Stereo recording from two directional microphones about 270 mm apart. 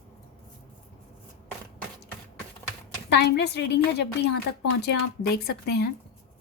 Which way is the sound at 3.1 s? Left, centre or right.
Left.